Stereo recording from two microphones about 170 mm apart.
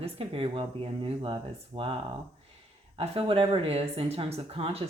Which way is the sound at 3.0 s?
30° right (ahead or behind).